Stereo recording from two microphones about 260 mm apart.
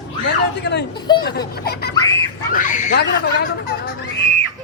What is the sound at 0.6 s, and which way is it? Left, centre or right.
Speech, left.